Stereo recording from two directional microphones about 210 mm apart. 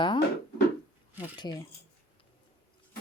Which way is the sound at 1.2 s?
20° left (ahead or behind).